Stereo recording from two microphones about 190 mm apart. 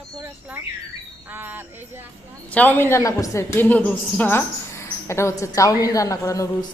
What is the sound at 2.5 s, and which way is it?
A woman's voice, 10° left (ahead or behind).